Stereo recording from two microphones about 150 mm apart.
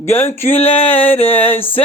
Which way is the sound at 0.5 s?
40° left (ahead or behind).